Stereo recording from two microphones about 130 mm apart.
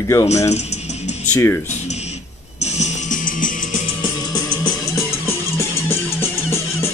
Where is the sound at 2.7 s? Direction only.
70° left (ahead or behind).